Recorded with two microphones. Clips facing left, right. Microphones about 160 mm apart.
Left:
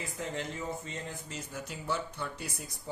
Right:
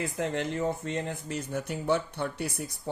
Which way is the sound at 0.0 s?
70° right (ahead or behind).